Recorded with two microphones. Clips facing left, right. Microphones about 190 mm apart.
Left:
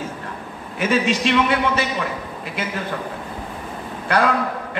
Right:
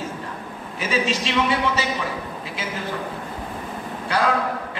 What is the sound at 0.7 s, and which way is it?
Speech, 55° left (ahead or behind).